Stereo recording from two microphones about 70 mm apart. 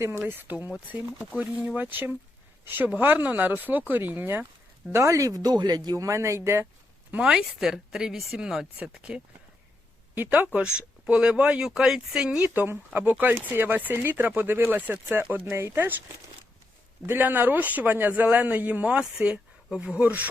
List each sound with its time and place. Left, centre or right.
0.0 s speech: right
4.9 s speech: right
5.4 s speech: right
6.0 s speech: right
7.1 s speech: centre
8.8 s speech: centre
11.6 s speech: centre
12.4 s speech: right
15.5 s speech: right
17.1 s speech: right